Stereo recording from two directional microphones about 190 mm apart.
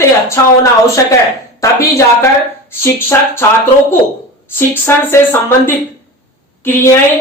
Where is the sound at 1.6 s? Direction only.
15° left (ahead or behind).